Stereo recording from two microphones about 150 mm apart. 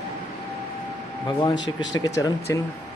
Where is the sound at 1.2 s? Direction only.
30° left (ahead or behind).